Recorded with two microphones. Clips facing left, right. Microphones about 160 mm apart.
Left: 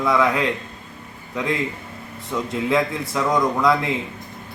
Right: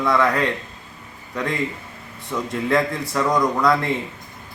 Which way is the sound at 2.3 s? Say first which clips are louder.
Even; 5° left (ahead or behind).